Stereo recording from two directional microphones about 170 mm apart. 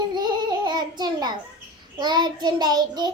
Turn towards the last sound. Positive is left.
turn(degrees=-25)  # may be behind; listen again after turning